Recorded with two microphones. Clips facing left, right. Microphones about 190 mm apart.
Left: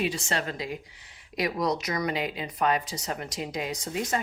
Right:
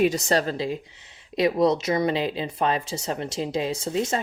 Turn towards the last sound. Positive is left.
turn(degrees=-25)  # may be behind; listen again after turning